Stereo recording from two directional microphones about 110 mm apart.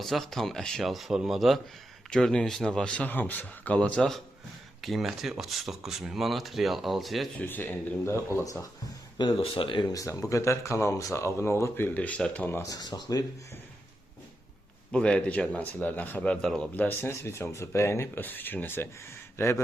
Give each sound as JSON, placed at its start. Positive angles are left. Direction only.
{"t": 0.0, "sound": "speech", "side_deg": 0}
{"t": 7.3, "sound": "speech", "side_deg": 20}
{"t": 9.1, "sound": "speech", "side_deg": 50}
{"t": 9.9, "sound": "speech", "side_deg": 30}
{"t": 12.6, "sound": "speech", "side_deg": 35}
{"t": 14.9, "sound": "speech", "side_deg": 10}